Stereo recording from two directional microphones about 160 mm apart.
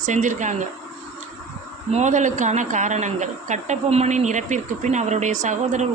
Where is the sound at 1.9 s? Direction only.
50° right (ahead or behind).